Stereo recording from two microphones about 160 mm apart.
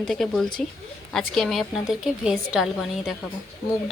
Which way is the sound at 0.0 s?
Centre (ahead or behind).